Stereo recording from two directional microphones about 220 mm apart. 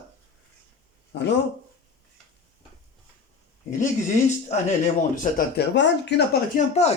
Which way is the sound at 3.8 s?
35° left (ahead or behind).